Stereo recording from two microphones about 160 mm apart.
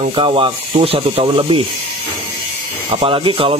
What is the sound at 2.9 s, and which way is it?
Speech, 35° right (ahead or behind).